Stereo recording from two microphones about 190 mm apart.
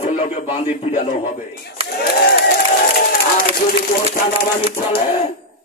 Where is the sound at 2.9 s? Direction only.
50° left (ahead or behind).